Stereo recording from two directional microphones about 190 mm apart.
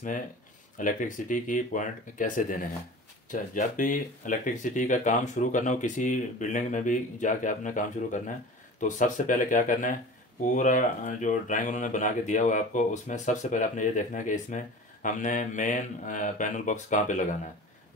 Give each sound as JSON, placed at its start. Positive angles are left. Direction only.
{"t": 0.7, "sound": "speech", "side_deg": 45}